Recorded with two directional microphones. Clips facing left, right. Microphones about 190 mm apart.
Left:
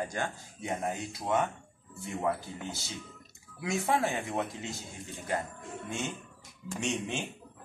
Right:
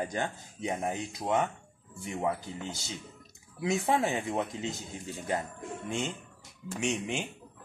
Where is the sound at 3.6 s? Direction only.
20° right (ahead or behind).